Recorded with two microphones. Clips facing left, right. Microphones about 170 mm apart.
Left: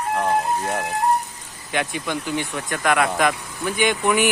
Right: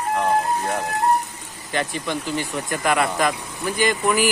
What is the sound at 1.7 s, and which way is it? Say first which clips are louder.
Speech: even; 5° left (ahead or behind).